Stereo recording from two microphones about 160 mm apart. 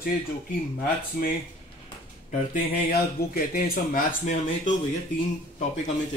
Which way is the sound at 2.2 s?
60° left (ahead or behind).